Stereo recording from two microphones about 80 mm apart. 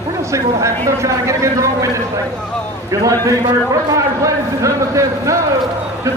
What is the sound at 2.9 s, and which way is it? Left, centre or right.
A man's voice, right.